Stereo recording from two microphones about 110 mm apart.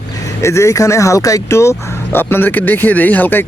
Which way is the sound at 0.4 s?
25° left (ahead or behind).